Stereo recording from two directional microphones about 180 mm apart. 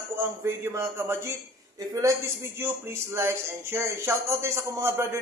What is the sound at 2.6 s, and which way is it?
A man's voice, 15° right (ahead or behind).